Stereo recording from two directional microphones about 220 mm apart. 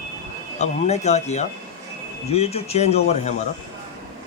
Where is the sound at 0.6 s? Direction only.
30° left (ahead or behind).